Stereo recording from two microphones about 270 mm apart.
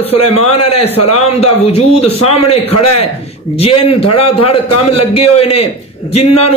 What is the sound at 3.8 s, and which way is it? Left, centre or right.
A man's voice, left.